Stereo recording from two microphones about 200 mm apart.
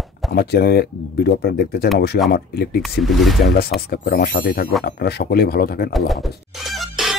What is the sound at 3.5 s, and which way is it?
Speech, 50° left (ahead or behind).